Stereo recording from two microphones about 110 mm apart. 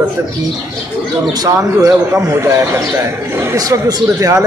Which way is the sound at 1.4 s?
35° right (ahead or behind).